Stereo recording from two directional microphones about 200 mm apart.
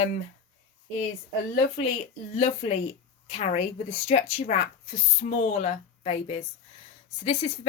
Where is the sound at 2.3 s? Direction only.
35° left (ahead or behind).